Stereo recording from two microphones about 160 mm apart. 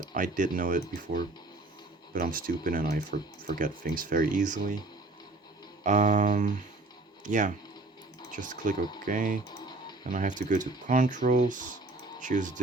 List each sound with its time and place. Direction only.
0.1 s speech: 55° right (ahead or behind)
5.8 s speech: 50° right (ahead or behind)
9.5 s music: 25° left (ahead or behind)
10.1 s speech: 55° right (ahead or behind)